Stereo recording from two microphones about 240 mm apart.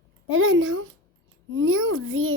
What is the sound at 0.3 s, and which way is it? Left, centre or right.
A child's voice, right.